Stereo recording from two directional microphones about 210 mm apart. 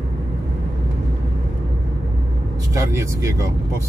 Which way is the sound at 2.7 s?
15° right (ahead or behind).